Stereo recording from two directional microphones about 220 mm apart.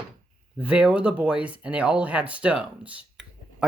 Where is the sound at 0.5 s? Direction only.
5° right (ahead or behind).